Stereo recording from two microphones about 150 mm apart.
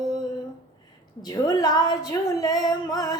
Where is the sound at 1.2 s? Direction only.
25° left (ahead or behind).